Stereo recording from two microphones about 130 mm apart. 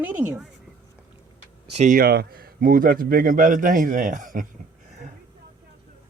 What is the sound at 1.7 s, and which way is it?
Speech, 75° right (ahead or behind).